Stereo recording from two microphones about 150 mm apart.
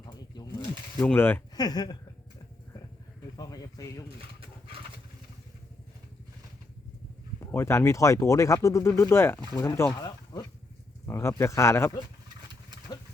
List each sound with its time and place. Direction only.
1.0 s speech: 15° left (ahead or behind)
1.5 s speech: 25° left (ahead or behind)
3.3 s speech: 25° left (ahead or behind)
7.3 s speech: 15° left (ahead or behind)